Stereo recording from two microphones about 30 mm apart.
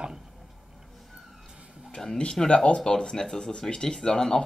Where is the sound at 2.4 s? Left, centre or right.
Left.